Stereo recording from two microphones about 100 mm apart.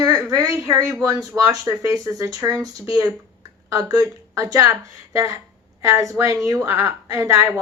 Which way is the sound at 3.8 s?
40° right (ahead or behind).